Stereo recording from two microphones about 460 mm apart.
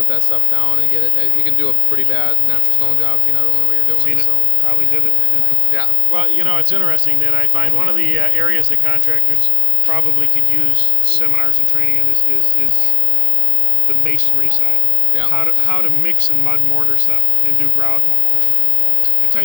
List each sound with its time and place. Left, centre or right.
0.1 s speech: left
3.9 s speech: right
5.7 s speech: left
6.1 s a man's voice: right
14.0 s a man's voice: right